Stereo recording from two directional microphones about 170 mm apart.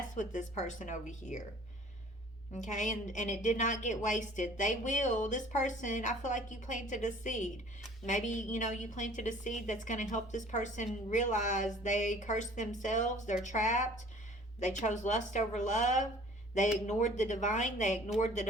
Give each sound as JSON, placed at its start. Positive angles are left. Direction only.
{"t": 0.1, "sound": "a woman's voice", "side_deg": 45}
{"t": 2.5, "sound": "a woman's voice", "side_deg": 45}